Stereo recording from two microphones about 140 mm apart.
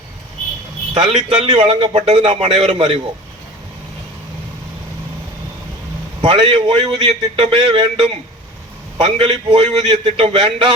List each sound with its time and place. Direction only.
0.9 s a man's voice: 40° right (ahead or behind)
6.2 s a man's voice: 40° right (ahead or behind)